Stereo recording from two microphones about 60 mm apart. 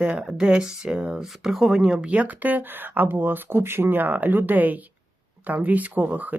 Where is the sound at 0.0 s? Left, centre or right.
Centre.